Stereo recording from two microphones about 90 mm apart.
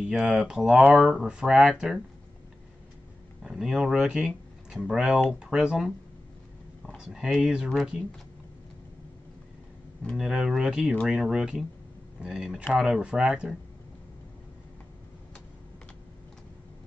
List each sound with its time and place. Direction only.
0.1 s speech: 5° right (ahead or behind)
3.4 s speech: 5° right (ahead or behind)
7.0 s speech: 5° right (ahead or behind)
10.1 s speech: 5° right (ahead or behind)